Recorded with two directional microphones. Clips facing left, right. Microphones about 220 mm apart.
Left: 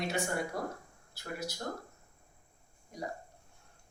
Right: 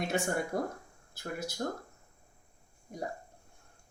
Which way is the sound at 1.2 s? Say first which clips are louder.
Right 2 dB; 50° right (ahead or behind).